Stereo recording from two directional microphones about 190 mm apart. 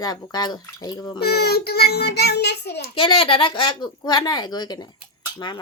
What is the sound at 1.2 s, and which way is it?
Child singing, 60° left (ahead or behind).